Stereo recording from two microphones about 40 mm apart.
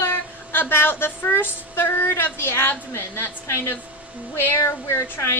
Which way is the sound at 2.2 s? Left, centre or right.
Left.